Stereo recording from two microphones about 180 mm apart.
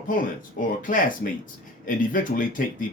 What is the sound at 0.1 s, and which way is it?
Speech, 50° left (ahead or behind).